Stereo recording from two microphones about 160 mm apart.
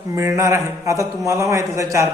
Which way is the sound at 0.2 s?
20° right (ahead or behind).